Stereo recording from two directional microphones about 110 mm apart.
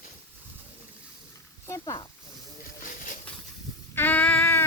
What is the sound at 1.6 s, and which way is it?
Speech, 30° left (ahead or behind).